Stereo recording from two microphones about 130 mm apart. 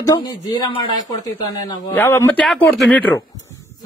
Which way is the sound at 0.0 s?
30° left (ahead or behind).